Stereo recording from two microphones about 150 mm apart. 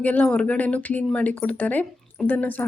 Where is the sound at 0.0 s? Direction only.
10° left (ahead or behind).